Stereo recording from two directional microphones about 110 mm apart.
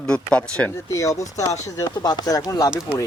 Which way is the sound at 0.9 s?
30° left (ahead or behind).